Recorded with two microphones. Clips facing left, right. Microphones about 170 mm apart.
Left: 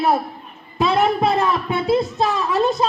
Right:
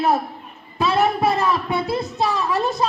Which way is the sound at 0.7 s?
20° left (ahead or behind).